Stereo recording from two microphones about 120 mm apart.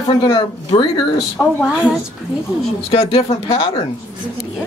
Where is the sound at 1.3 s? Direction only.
Centre (ahead or behind).